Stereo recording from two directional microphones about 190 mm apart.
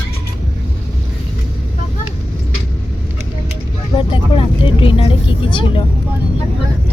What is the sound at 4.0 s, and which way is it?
Vehicle, 25° left (ahead or behind).